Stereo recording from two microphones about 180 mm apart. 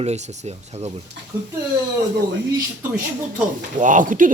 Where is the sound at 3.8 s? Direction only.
45° right (ahead or behind).